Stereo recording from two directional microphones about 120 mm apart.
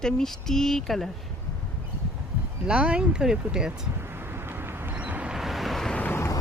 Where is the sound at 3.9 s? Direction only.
20° right (ahead or behind); by 6.0 s 5° left (ahead or behind).